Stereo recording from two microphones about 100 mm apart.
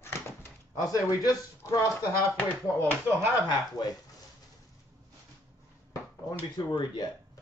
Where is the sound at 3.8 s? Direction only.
40° left (ahead or behind).